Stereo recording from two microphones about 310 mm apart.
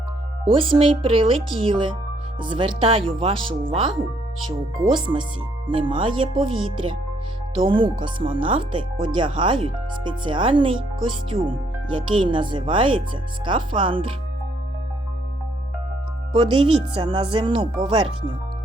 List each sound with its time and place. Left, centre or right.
0.4 s speech: centre
7.6 s speech: centre
16.3 s speech: centre